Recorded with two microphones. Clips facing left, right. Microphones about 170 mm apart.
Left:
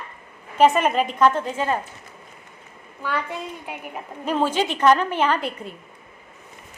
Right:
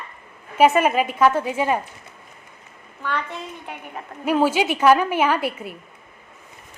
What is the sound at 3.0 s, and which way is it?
Speech, 10° left (ahead or behind).